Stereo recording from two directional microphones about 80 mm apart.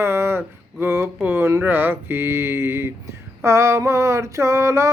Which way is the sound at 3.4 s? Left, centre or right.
Right.